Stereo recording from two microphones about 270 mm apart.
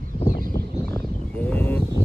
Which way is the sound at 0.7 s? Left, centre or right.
Centre.